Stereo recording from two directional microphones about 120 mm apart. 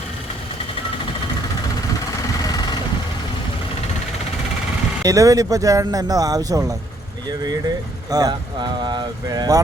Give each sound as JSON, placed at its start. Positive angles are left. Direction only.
{"t": 2.2, "sound": "vehicle", "side_deg": 30}
{"t": 5.0, "sound": "speech", "side_deg": -30}